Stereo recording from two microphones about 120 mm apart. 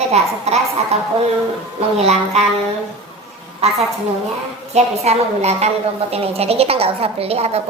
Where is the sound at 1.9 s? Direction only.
60° right (ahead or behind).